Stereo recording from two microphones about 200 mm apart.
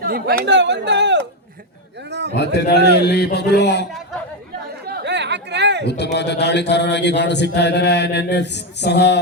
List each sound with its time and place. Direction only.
0.0 s speech: 50° right (ahead or behind)
2.0 s a sound: 60° right (ahead or behind)
2.3 s a man's voice: 55° left (ahead or behind)
4.9 s chatter: 55° right (ahead or behind)
5.8 s a man's voice: 55° left (ahead or behind)